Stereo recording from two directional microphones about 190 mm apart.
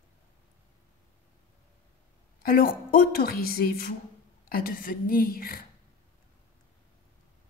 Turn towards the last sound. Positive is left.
turn(degrees=50)  # may be behind; listen again after turning